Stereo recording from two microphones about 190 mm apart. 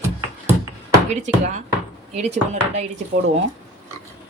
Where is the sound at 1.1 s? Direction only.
40° right (ahead or behind).